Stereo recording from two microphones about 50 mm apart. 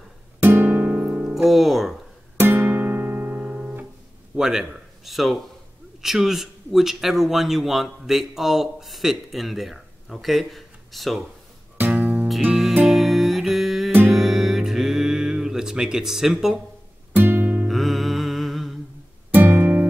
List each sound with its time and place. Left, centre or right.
0.4 s music: right
1.3 s speech: centre
2.3 s music: right
4.4 s a man's voice: centre
11.9 s music: right
12.3 s music: centre
17.1 s music: right
17.6 s music: centre
19.3 s music: right